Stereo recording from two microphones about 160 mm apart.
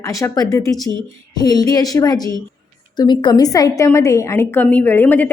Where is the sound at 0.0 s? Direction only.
20° left (ahead or behind).